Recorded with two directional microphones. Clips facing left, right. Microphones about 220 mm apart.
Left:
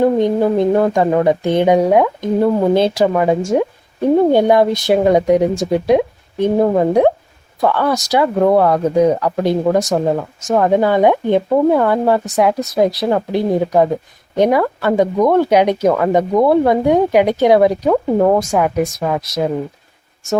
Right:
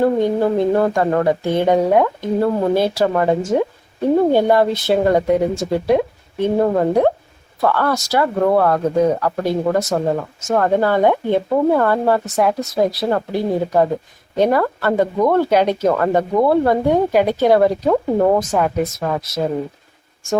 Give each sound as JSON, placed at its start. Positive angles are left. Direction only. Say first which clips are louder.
{"t": 0.0, "sound": "speech", "louder": "left 2 dB", "side_deg": 15}
{"t": 3.1, "sound": "speech", "louder": "left 2 dB", "side_deg": 10}